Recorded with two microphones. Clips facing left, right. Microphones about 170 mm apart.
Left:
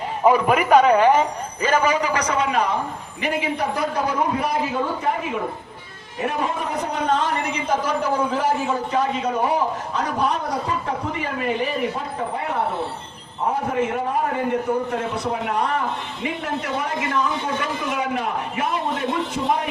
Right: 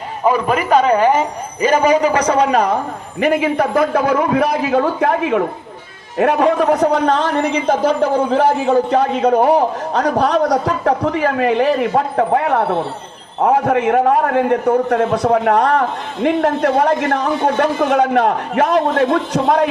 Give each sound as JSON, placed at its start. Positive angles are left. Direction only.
{"t": 0.3, "sound": "a man's voice", "side_deg": 15}
{"t": 0.7, "sound": "a woman's voice", "side_deg": 0}
{"t": 1.6, "sound": "a man's voice", "side_deg": -20}
{"t": 2.1, "sound": "a man's voice", "side_deg": -35}
{"t": 3.2, "sound": "a man's voice", "side_deg": -50}
{"t": 7.7, "sound": "a man's voice", "side_deg": -65}